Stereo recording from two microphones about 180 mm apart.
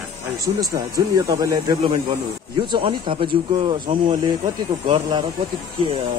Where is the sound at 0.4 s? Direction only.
20° right (ahead or behind).